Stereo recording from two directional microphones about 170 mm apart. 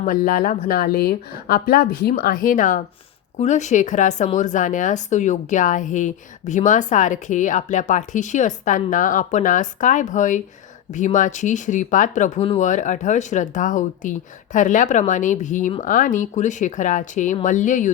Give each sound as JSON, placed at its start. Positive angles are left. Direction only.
{"t": 0.0, "sound": "a woman's voice", "side_deg": 55}